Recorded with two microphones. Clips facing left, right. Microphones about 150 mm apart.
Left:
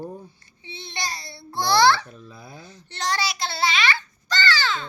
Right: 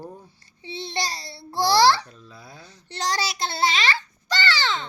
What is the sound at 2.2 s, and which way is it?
Speech, 15° left (ahead or behind).